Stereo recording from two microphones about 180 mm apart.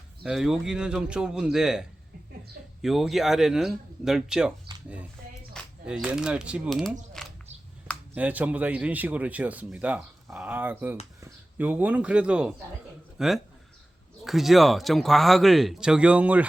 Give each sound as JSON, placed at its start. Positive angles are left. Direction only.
{"t": 0.2, "sound": "speech", "side_deg": 0}
{"t": 2.8, "sound": "speech", "side_deg": 0}
{"t": 5.8, "sound": "speech", "side_deg": -5}
{"t": 7.2, "sound": "a sound", "side_deg": 5}
{"t": 8.1, "sound": "a man's voice", "side_deg": -10}